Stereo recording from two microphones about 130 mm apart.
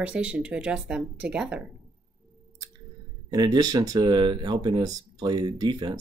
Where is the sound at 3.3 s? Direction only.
30° right (ahead or behind).